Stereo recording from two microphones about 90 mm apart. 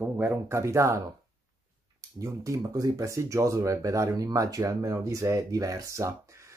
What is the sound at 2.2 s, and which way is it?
Speech, 40° right (ahead or behind).